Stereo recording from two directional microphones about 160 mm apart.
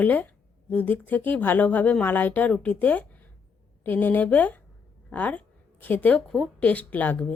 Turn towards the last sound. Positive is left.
turn(degrees=10)  # may be behind; listen again after turning